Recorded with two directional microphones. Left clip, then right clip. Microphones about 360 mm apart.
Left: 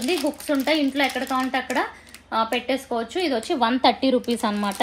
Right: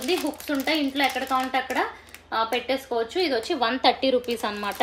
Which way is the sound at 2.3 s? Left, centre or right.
Centre.